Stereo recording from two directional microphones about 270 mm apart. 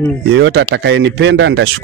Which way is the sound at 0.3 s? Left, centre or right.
Right.